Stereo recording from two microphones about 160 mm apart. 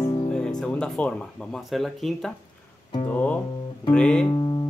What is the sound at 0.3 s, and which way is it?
Speech, 5° left (ahead or behind).